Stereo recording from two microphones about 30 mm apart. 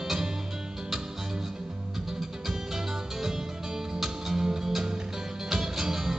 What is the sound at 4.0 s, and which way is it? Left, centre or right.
Music, centre.